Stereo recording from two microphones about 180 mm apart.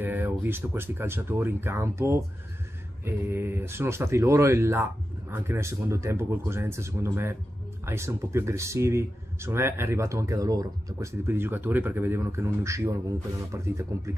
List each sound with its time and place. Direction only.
0.0 s speech: 10° right (ahead or behind)